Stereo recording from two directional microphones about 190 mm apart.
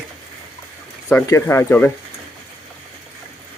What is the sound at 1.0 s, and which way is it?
Speech, 15° left (ahead or behind).